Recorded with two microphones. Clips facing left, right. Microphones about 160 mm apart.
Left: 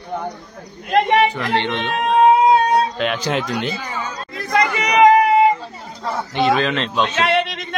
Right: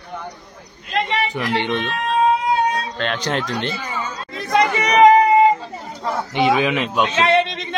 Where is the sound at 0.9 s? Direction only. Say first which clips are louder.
Left 7 dB; 55° left (ahead or behind).